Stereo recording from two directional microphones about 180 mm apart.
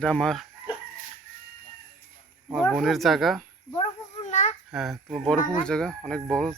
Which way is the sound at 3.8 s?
40° left (ahead or behind).